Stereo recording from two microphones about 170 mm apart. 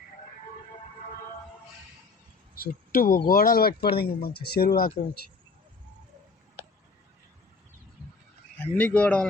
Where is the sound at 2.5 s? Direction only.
60° left (ahead or behind).